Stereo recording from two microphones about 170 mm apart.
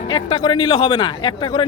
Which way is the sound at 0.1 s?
25° left (ahead or behind).